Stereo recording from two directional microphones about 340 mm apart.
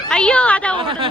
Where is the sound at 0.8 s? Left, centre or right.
Centre.